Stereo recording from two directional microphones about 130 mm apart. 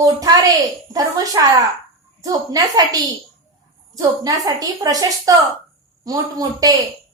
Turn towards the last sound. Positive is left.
turn(degrees=-30)  # may be behind; listen again after turning